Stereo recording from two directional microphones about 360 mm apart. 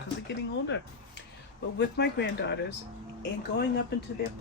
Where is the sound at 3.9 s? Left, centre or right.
Left.